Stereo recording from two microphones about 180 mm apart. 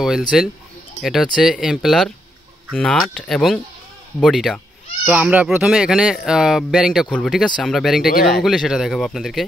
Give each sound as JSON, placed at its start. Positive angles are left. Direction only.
{"t": 0.3, "sound": "speech", "side_deg": 0}
{"t": 8.1, "sound": "speech", "side_deg": 55}
{"t": 8.4, "sound": "speech", "side_deg": 0}